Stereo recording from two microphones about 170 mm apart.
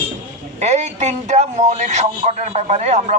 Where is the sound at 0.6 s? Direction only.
40° right (ahead or behind).